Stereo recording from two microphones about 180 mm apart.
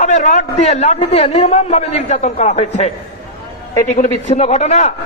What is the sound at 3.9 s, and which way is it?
Speech, 40° left (ahead or behind).